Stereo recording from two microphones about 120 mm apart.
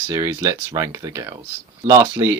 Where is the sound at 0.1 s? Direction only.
25° right (ahead or behind).